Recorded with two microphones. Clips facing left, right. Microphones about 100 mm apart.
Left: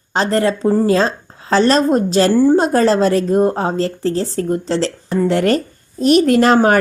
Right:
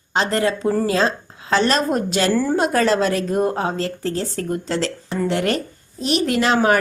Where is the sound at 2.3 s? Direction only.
25° left (ahead or behind).